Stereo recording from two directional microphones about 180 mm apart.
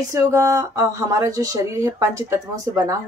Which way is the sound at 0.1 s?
15° right (ahead or behind).